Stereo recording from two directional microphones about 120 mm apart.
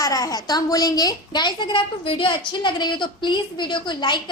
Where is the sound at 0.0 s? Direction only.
30° left (ahead or behind).